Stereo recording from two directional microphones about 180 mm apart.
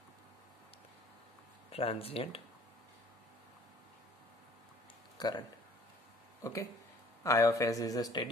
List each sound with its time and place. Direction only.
1.7 s speech: 30° left (ahead or behind)
5.1 s a sound: 25° left (ahead or behind)
6.4 s speech: 20° left (ahead or behind)